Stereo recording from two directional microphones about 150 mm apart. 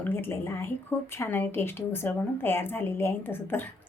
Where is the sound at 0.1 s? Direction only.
15° left (ahead or behind).